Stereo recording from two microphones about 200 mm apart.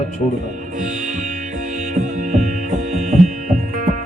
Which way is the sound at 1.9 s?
40° right (ahead or behind).